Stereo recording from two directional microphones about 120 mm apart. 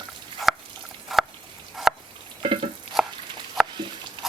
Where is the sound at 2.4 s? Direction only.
50° right (ahead or behind).